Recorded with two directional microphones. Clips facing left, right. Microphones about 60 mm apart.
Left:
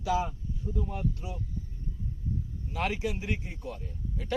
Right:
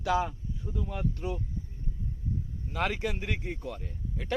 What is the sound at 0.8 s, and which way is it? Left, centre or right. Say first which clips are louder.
Speech: right 1 dB; right.